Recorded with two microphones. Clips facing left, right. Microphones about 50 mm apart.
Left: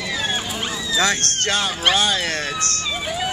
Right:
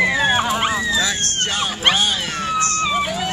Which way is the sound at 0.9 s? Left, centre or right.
Left.